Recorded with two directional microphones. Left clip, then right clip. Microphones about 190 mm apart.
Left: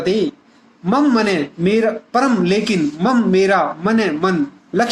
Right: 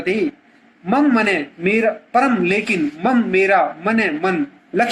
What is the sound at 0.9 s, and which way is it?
A man's voice, 40° left (ahead or behind).